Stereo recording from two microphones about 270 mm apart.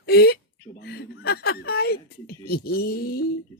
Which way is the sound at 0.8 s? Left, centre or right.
Left.